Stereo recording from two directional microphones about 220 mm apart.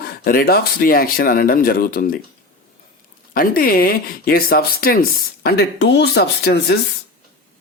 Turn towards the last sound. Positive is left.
turn(degrees=50)  # may be behind; listen again after turning